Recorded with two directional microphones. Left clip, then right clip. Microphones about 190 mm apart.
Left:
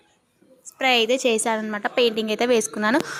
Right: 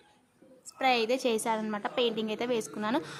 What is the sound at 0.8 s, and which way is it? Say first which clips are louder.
A woman's voice: left 8 dB; 25° left (ahead or behind).